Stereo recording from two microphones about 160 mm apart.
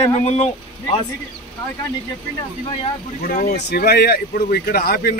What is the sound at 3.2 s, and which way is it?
Speech, 65° left (ahead or behind).